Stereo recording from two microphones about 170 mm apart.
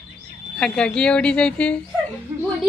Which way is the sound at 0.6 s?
5° left (ahead or behind).